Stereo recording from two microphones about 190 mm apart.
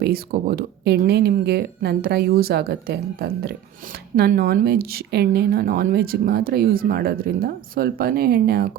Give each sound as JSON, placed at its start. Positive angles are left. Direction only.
{"t": 0.0, "sound": "a woman's voice", "side_deg": -50}